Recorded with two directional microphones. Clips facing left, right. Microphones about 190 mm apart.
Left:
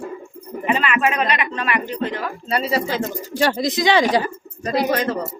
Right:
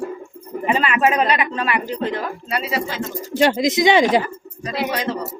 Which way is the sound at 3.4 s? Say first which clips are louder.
Right 3 dB; 20° right (ahead or behind).